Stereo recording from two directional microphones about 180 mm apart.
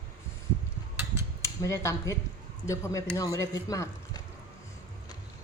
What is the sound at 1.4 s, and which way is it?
Speech, 15° left (ahead or behind).